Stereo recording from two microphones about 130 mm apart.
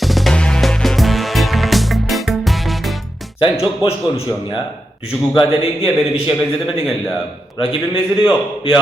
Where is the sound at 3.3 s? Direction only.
45° left (ahead or behind).